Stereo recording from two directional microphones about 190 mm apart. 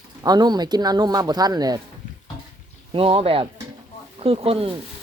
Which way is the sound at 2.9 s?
30° right (ahead or behind).